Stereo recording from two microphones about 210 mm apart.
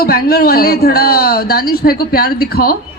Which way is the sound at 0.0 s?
45° left (ahead or behind).